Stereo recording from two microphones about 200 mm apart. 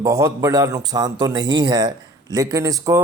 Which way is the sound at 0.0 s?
15° right (ahead or behind).